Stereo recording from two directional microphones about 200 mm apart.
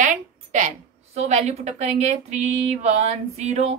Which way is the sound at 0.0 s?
35° right (ahead or behind).